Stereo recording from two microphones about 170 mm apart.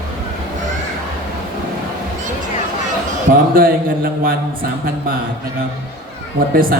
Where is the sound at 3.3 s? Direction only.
55° right (ahead or behind).